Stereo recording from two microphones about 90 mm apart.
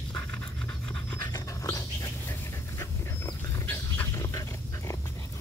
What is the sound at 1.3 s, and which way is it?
Dog, 35° left (ahead or behind).